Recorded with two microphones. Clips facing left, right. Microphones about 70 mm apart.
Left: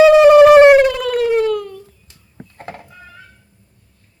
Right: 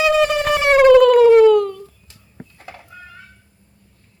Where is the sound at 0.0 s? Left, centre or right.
Centre.